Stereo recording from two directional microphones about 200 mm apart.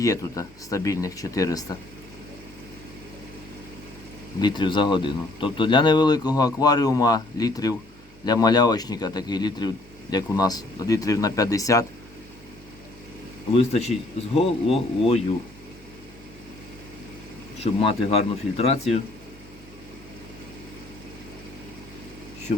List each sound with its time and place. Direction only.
0.0 s speech: 15° left (ahead or behind)
4.4 s speech: 20° left (ahead or behind)
13.5 s speech: 30° left (ahead or behind)
17.6 s speech: 30° left (ahead or behind)